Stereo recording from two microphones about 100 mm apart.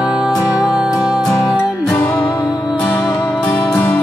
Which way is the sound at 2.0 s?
20° left (ahead or behind).